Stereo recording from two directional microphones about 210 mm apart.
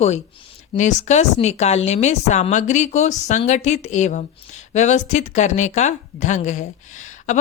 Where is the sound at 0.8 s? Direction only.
35° left (ahead or behind).